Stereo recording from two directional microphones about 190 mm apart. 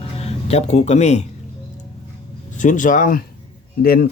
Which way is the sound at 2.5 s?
40° left (ahead or behind).